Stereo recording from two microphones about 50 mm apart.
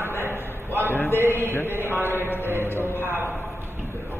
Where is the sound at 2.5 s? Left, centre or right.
Left.